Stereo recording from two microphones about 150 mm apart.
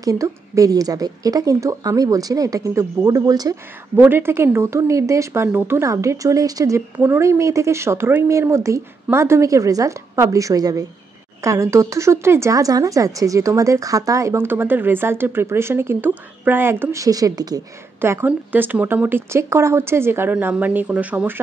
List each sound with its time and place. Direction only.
0.0 s a woman's voice: 20° right (ahead or behind)